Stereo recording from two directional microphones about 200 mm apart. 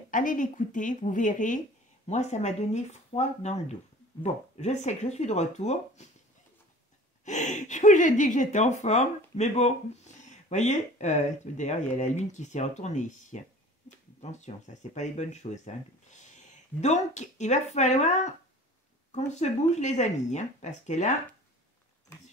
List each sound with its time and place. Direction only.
0.1 s speech: 40° left (ahead or behind)
7.2 s speech: 35° left (ahead or behind)
19.3 s speech: 35° left (ahead or behind)